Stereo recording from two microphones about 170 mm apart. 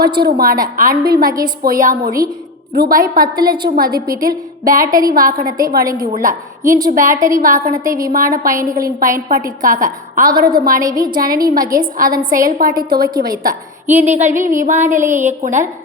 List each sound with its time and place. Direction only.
0.2 s a woman's voice: 65° right (ahead or behind)
13.9 s a woman's voice: 45° right (ahead or behind)